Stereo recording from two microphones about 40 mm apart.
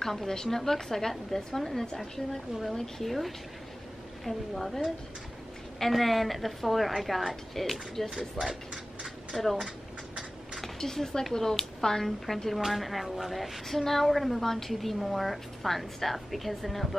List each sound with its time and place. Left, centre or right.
0.0 s a woman's voice: centre
8.4 s speech: right
9.3 s a woman's voice: centre